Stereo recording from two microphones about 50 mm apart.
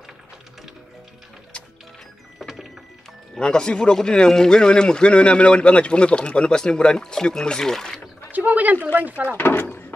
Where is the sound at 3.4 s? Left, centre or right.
Centre.